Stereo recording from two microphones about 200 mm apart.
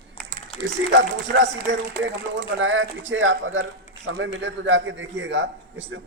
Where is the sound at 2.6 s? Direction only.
75° right (ahead or behind).